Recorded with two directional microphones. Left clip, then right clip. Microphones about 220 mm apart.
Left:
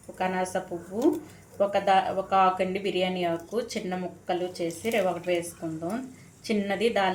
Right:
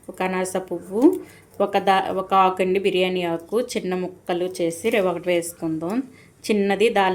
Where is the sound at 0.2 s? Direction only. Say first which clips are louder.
Right 4 dB; 45° right (ahead or behind).